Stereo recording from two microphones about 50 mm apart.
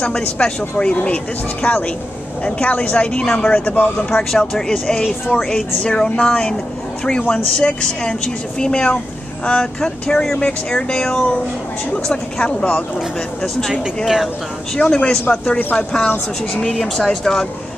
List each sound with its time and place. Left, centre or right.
0.0 s speech: centre
4.1 s speech: centre
14.0 s speech: centre
14.8 s speech: centre
16.7 s speech: centre